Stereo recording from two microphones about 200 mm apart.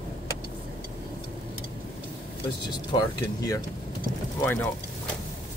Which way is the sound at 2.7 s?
20° left (ahead or behind).